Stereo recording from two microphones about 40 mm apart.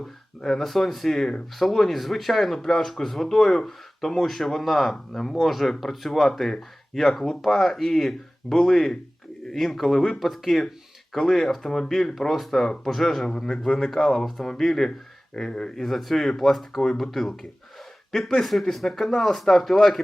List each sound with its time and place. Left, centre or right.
0.4 s speech: centre
14.3 s speech: centre
15.9 s speech: centre